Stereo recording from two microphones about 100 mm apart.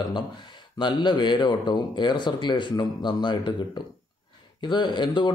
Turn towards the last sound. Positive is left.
turn(degrees=50)  # may be behind; listen again after turning